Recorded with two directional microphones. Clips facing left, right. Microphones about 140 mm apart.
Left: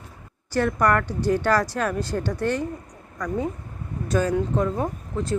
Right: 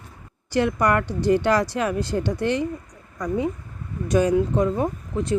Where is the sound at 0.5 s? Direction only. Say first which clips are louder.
Right 1 dB; 15° right (ahead or behind).